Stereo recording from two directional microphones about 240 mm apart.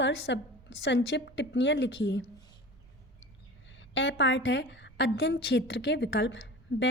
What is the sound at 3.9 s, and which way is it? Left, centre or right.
A woman's voice, left.